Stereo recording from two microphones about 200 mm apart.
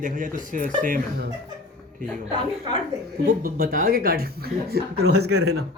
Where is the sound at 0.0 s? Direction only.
40° right (ahead or behind).